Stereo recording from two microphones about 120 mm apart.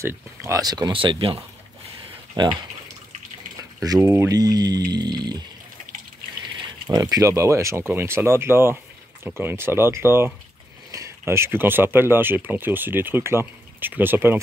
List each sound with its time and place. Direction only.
0.0 s speech: 25° right (ahead or behind)
3.8 s speech: 30° right (ahead or behind)
6.9 s speech: 30° right (ahead or behind)